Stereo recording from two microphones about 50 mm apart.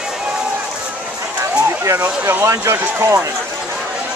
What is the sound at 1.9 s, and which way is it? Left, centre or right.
Speech, right.